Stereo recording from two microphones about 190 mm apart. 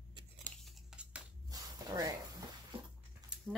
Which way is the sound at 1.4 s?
20° right (ahead or behind).